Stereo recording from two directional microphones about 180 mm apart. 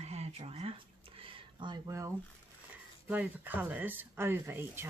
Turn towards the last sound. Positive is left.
turn(degrees=-10)  # may be behind; listen again after turning